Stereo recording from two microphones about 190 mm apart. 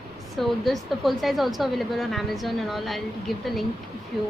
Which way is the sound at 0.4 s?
Centre (ahead or behind).